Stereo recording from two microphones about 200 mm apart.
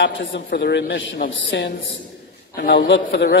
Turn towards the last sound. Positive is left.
turn(degrees=55)  # may be behind; listen again after turning